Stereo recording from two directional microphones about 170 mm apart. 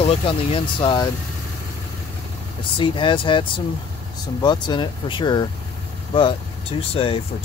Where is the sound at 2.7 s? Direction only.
30° left (ahead or behind).